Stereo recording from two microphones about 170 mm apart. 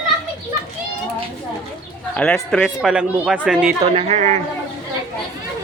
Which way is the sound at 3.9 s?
40° right (ahead or behind).